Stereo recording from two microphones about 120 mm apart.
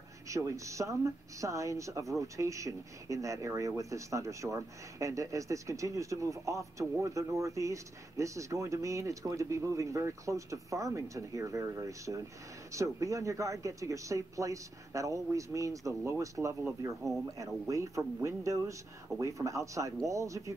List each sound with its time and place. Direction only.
0.3 s speech: 25° right (ahead or behind)